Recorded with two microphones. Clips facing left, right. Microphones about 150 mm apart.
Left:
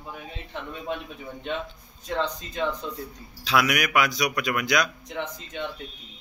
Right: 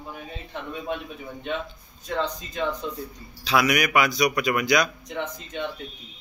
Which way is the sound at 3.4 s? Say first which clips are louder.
Right 2 dB; centre (ahead or behind).